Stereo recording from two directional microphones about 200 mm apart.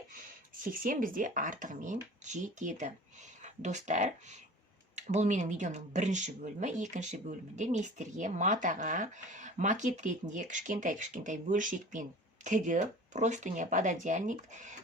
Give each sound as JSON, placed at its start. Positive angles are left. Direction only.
{"t": 0.6, "sound": "speech", "side_deg": -45}